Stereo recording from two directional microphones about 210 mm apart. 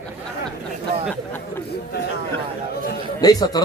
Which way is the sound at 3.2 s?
20° left (ahead or behind).